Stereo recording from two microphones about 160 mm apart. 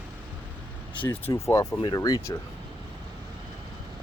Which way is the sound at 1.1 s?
15° left (ahead or behind).